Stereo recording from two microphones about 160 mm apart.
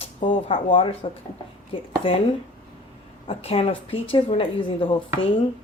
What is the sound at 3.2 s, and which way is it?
Speech, 35° left (ahead or behind).